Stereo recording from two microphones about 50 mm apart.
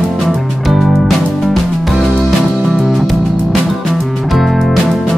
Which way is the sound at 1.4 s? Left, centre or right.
Centre.